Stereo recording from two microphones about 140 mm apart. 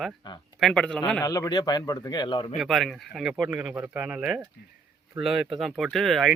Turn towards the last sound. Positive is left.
turn(degrees=0)  # may be behind; listen again after turning